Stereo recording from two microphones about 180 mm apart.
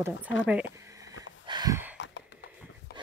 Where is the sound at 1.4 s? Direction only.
25° right (ahead or behind).